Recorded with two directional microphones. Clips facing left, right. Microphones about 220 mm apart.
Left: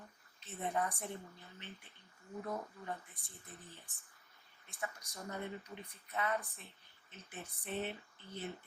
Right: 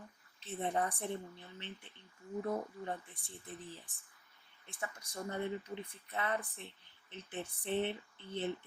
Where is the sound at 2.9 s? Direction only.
30° right (ahead or behind).